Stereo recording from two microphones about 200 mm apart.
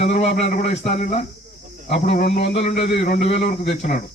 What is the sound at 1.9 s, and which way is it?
Speech, 55° left (ahead or behind).